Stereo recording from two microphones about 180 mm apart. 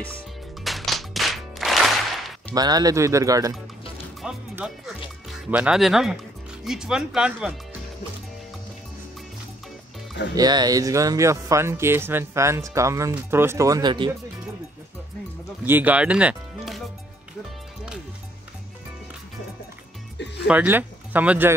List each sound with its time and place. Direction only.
0.7 s music: centre (ahead or behind)
2.5 s speech: 20° right (ahead or behind)
4.2 s music: 5° right (ahead or behind)
6.6 s speech: 5° right (ahead or behind)
10.3 s speech: 20° right (ahead or behind)
15.6 s speech: 10° right (ahead or behind)
20.4 s speech: 10° right (ahead or behind)